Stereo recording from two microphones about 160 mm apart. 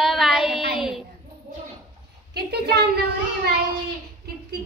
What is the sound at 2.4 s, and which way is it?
A child's voice, 90° right.